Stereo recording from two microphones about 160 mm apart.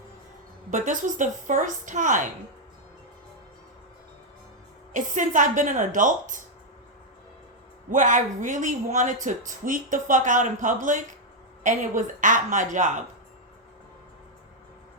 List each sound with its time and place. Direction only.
0.7 s speech: 50° right (ahead or behind)
4.9 s speech: 50° right (ahead or behind)
7.9 s speech: 55° right (ahead or behind)